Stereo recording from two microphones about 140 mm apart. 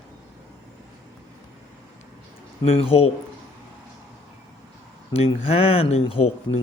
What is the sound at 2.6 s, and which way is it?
Speech, 45° left (ahead or behind).